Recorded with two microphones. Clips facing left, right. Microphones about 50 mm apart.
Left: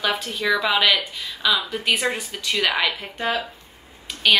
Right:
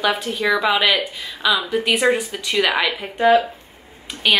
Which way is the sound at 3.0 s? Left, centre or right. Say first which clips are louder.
Right 10 dB; centre.